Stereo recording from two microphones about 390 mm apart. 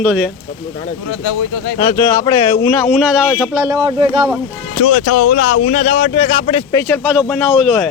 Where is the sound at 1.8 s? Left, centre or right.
Centre.